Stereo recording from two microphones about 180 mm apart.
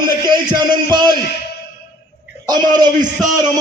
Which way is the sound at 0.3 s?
25° right (ahead or behind).